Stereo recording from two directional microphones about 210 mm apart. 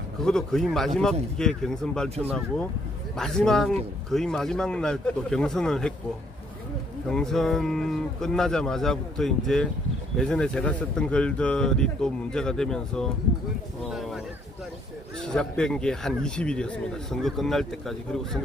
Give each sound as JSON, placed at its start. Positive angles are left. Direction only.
{"t": 0.2, "sound": "speech", "side_deg": 0}
{"t": 2.0, "sound": "speech", "side_deg": -30}
{"t": 3.2, "sound": "speech", "side_deg": 0}
{"t": 7.1, "sound": "speech", "side_deg": 0}